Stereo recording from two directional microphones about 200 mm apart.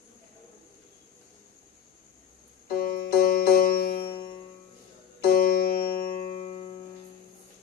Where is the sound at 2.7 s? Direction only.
50° left (ahead or behind).